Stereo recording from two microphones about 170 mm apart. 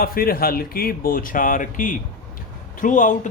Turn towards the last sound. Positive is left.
turn(degrees=50)  # may be behind; listen again after turning